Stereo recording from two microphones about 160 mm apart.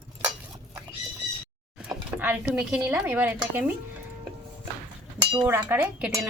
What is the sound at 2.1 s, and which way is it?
Speech, 10° right (ahead or behind).